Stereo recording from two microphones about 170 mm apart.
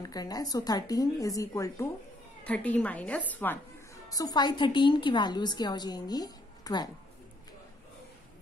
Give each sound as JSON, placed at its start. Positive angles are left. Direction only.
{"t": 0.0, "sound": "a woman's voice", "side_deg": 20}
{"t": 2.4, "sound": "a woman's voice", "side_deg": 10}